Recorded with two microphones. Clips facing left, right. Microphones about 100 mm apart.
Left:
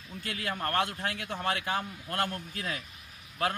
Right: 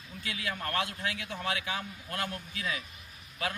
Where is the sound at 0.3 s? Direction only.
50° left (ahead or behind).